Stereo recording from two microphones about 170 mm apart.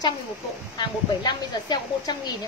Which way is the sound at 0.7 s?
25° left (ahead or behind).